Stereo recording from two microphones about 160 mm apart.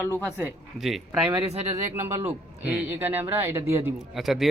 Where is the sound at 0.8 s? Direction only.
Centre (ahead or behind).